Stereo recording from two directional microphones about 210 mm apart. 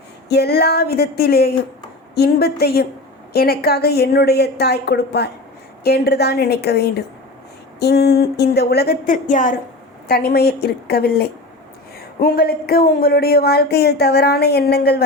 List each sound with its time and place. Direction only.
0.3 s speech: 50° left (ahead or behind)